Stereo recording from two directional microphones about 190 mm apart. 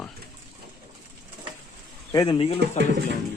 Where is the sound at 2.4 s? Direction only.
30° left (ahead or behind).